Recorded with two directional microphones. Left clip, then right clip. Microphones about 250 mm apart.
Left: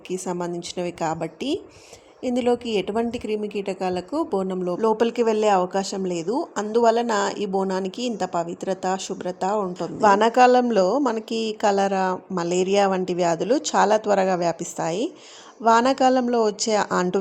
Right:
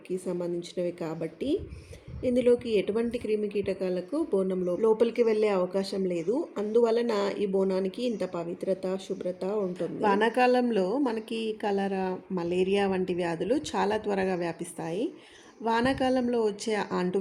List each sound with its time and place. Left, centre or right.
0.1 s a woman's voice: left